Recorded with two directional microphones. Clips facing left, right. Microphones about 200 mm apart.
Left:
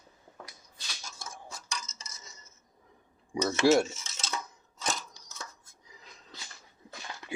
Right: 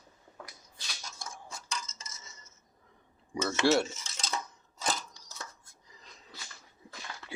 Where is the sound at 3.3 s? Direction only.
20° left (ahead or behind).